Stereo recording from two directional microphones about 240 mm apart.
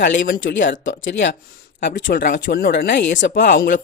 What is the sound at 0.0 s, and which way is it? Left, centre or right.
Speech, left.